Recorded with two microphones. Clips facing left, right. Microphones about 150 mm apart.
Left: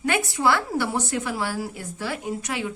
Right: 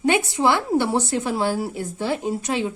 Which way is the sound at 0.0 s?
20° right (ahead or behind).